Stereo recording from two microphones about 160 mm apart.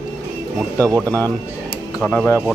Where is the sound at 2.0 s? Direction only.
10° left (ahead or behind).